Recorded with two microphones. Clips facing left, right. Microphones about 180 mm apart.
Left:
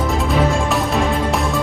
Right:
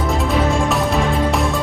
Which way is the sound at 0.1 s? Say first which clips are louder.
Right 1 dB; centre (ahead or behind).